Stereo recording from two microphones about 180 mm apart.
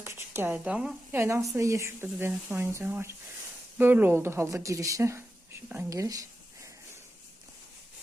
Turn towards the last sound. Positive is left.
turn(degrees=-20)  # may be behind; listen again after turning